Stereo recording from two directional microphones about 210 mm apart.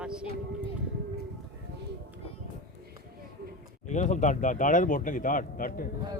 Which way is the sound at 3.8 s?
35° left (ahead or behind).